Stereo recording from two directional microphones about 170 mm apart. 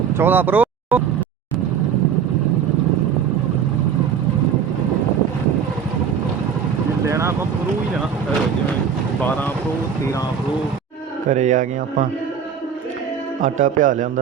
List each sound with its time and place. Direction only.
0.2 s speech: 10° right (ahead or behind)
7.1 s vehicle: 15° right (ahead or behind)
11.3 s a man's voice: 45° right (ahead or behind)
13.4 s a man's voice: 50° right (ahead or behind)